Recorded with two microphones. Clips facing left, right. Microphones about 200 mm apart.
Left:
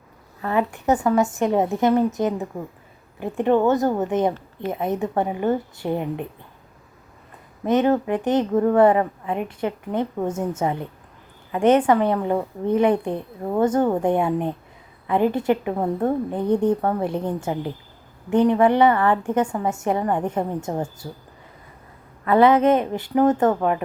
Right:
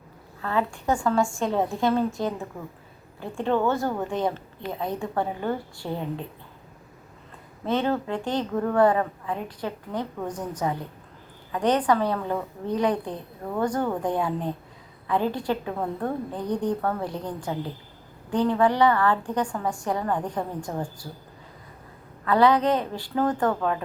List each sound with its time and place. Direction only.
0.4 s a woman's voice: 20° left (ahead or behind)
7.6 s a woman's voice: 15° left (ahead or behind)
22.2 s a woman's voice: 20° left (ahead or behind)